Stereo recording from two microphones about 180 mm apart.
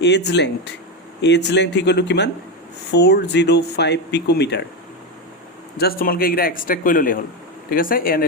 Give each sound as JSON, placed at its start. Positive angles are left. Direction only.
{"t": 0.0, "sound": "speech", "side_deg": 70}
{"t": 5.7, "sound": "a man's voice", "side_deg": 55}